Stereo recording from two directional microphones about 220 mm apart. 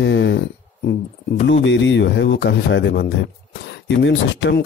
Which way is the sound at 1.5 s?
55° left (ahead or behind).